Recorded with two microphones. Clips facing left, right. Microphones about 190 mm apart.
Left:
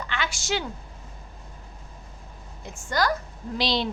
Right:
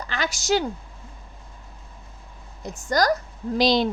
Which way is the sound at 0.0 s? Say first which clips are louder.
Right 3 dB; 40° right (ahead or behind).